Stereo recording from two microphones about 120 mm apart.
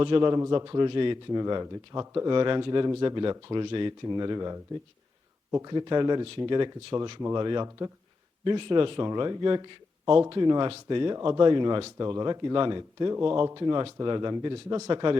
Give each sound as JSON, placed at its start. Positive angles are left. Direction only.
{"t": 0.0, "sound": "a man's voice", "side_deg": -40}
{"t": 0.3, "sound": "speech", "side_deg": -25}
{"t": 0.7, "sound": "a man's voice", "side_deg": -35}
{"t": 5.6, "sound": "a man's voice", "side_deg": -35}